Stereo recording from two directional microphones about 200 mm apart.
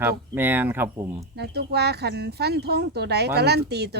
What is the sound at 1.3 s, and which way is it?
Speech, 55° right (ahead or behind).